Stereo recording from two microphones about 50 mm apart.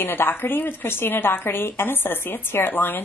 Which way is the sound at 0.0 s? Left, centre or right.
Left.